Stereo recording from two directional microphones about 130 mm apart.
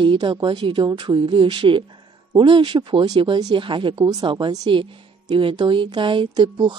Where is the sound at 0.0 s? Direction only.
40° right (ahead or behind).